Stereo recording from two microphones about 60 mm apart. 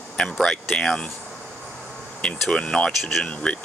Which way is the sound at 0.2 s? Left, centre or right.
Centre.